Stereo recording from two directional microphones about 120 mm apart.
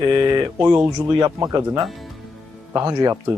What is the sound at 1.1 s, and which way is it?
Speech, 35° right (ahead or behind).